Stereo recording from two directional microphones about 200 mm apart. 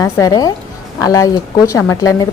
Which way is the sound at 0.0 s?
15° left (ahead or behind).